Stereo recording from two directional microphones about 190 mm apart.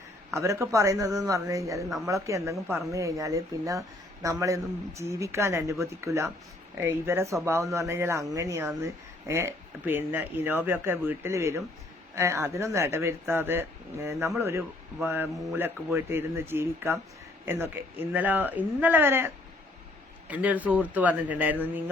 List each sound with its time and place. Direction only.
0.3 s speech: 15° right (ahead or behind)